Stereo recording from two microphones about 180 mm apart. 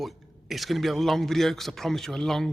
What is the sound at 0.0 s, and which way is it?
A man's voice, centre (ahead or behind).